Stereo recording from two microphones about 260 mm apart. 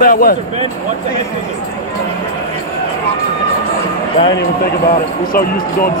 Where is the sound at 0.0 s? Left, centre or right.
Left.